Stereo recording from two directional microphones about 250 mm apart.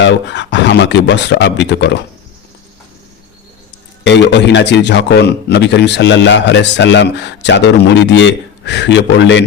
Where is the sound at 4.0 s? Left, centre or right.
Left.